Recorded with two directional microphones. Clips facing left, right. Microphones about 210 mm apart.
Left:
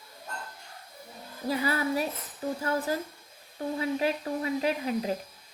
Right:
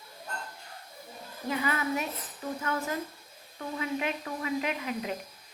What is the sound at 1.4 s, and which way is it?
Speech, 35° left (ahead or behind).